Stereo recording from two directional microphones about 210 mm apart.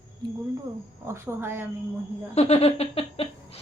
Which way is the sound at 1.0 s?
10° right (ahead or behind).